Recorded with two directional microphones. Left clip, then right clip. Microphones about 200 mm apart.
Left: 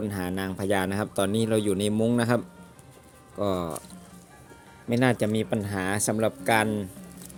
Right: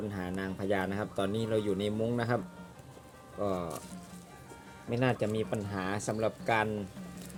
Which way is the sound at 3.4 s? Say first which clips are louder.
Left 6 dB; 60° left (ahead or behind).